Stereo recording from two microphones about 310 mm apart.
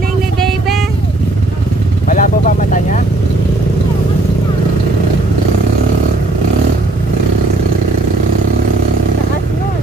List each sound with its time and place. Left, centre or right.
2.0 s vehicle: left